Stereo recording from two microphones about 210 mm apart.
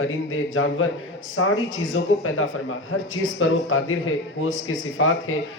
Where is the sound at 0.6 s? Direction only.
90° left.